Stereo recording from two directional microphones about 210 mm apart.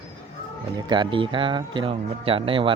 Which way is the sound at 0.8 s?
20° right (ahead or behind).